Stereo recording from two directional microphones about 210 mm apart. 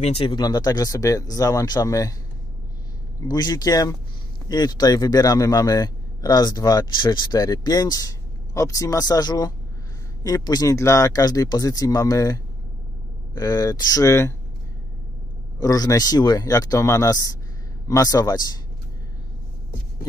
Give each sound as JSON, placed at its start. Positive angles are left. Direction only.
{"t": 0.0, "sound": "a man's voice", "side_deg": 25}
{"t": 3.2, "sound": "a man's voice", "side_deg": 20}
{"t": 15.6, "sound": "a man's voice", "side_deg": 15}